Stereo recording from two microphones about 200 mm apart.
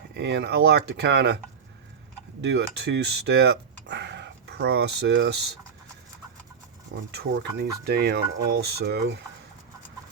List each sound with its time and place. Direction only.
0.2 s speech: 60° right (ahead or behind)
2.4 s speech: 55° right (ahead or behind)
6.9 s speech: 55° right (ahead or behind)